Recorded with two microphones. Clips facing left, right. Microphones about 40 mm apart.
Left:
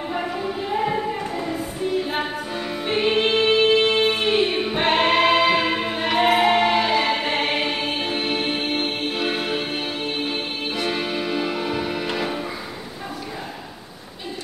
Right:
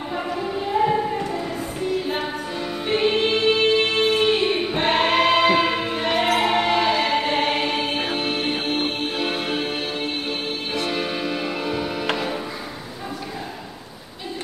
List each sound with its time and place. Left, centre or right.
0.4 s music: centre
2.9 s music: centre
4.3 s choir: centre
6.1 s music: centre
6.4 s music: centre
10.9 s music: centre